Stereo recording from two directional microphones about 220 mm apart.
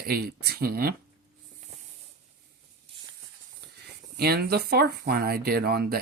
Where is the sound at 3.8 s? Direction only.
45° right (ahead or behind).